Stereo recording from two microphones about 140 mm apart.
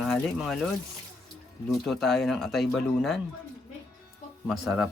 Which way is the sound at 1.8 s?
Centre (ahead or behind).